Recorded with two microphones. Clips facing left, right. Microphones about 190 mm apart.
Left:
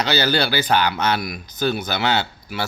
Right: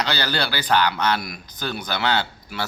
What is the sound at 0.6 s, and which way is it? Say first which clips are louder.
Speech: left 1 dB; 25° left (ahead or behind).